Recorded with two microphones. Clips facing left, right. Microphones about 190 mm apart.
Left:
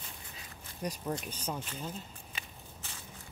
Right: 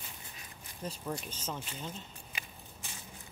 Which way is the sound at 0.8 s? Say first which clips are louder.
Left 3 dB; 15° left (ahead or behind).